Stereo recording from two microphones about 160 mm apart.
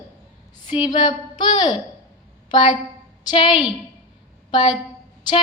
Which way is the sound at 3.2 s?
30° left (ahead or behind).